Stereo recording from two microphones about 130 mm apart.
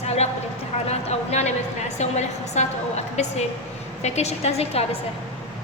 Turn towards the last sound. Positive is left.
turn(degrees=50)  # may be behind; listen again after turning